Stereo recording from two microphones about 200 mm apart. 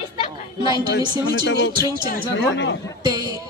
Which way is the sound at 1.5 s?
55° left (ahead or behind).